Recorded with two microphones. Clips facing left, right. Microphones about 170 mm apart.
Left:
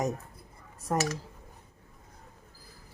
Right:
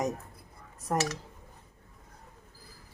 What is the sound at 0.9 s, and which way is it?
Speech, centre (ahead or behind).